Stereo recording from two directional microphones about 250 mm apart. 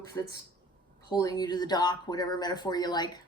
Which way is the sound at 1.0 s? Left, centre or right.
Centre.